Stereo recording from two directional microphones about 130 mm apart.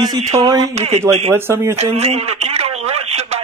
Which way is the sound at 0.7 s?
55° right (ahead or behind).